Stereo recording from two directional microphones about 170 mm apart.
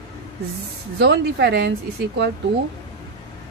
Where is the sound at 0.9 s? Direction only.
80° right.